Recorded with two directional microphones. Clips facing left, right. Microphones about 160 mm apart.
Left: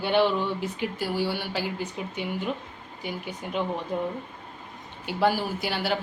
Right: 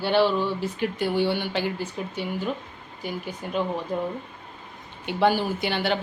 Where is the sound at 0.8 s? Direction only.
5° left (ahead or behind).